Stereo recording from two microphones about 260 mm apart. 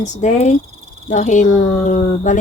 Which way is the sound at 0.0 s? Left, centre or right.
Left.